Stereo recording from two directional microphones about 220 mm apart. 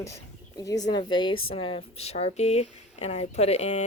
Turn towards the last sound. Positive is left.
turn(degrees=30)  # may be behind; listen again after turning